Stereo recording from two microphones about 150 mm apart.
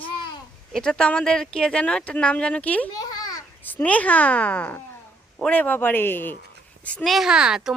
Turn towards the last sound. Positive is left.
turn(degrees=-5)  # may be behind; listen again after turning